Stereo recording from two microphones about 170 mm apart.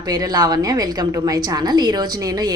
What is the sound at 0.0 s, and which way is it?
A woman's voice, 20° right (ahead or behind).